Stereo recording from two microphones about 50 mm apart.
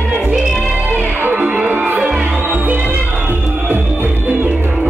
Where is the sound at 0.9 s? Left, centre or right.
Right.